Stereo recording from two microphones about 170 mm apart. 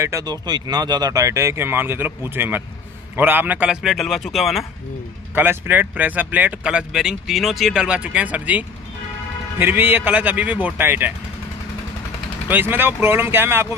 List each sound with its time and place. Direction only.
0.0 s a man's voice: 20° right (ahead or behind); by 4.6 s centre (ahead or behind)
5.3 s speech: 10° right (ahead or behind)
12.4 s speech: 10° right (ahead or behind)